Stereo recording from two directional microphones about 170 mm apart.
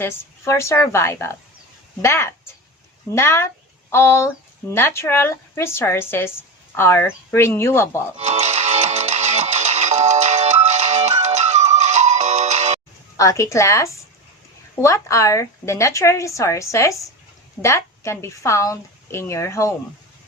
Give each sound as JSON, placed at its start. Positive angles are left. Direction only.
{"t": 0.0, "sound": "speech", "side_deg": 15}
{"t": 8.2, "sound": "music", "side_deg": -40}
{"t": 13.1, "sound": "speech", "side_deg": 20}